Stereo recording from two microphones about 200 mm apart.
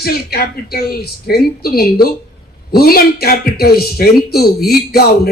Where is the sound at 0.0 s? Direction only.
50° left (ahead or behind).